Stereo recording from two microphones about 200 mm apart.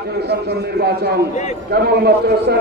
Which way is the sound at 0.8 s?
55° right (ahead or behind).